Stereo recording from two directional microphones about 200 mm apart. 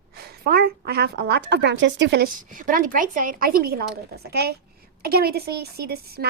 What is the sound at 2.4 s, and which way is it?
A woman's voice, 40° right (ahead or behind).